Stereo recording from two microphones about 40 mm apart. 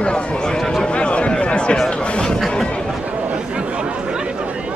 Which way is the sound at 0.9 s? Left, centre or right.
Left.